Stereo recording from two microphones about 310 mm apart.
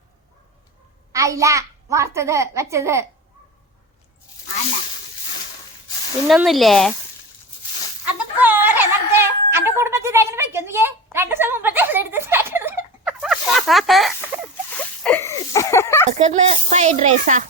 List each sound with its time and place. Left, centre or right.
1.1 s a child's voice: centre
6.2 s speech: centre
8.0 s music: centre
15.0 s a sound: centre
16.1 s speech: right